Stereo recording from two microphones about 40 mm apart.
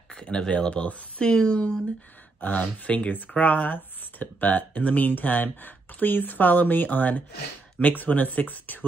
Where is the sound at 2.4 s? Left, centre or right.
Left.